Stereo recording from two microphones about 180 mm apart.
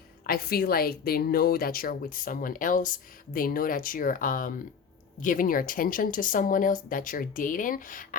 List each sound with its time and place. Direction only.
0.3 s a woman's voice: 55° left (ahead or behind)